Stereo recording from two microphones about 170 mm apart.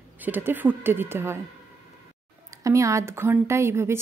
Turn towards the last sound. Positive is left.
turn(degrees=-15)  # may be behind; listen again after turning